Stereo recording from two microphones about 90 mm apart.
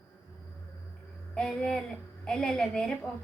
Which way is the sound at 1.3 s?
10° left (ahead or behind).